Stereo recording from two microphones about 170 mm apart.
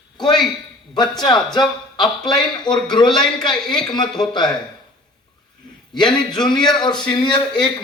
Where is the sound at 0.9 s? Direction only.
25° left (ahead or behind).